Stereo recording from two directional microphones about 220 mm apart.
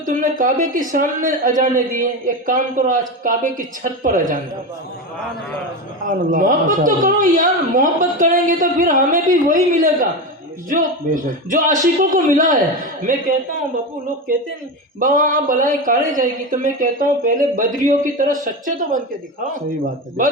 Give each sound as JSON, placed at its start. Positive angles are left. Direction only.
{"t": 0.0, "sound": "a man's voice", "side_deg": -35}
{"t": 6.3, "sound": "a man's voice", "side_deg": -35}
{"t": 14.9, "sound": "a man's voice", "side_deg": -35}
{"t": 19.8, "sound": "a man's voice", "side_deg": -35}